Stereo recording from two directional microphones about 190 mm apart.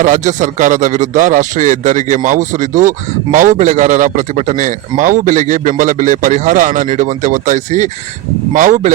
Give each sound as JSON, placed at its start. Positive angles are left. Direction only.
{"t": 0.0, "sound": "a man's voice", "side_deg": -40}